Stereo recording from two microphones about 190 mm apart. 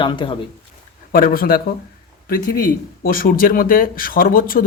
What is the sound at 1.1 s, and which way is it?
Speech, 50° left (ahead or behind).